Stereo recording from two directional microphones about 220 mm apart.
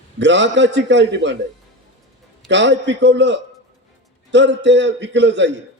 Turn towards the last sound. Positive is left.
turn(degrees=-55)  # may be behind; listen again after turning